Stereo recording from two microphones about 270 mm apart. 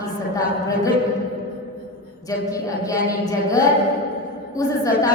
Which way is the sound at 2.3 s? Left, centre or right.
Centre.